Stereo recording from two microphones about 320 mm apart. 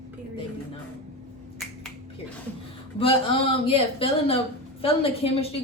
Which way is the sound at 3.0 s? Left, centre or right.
Centre.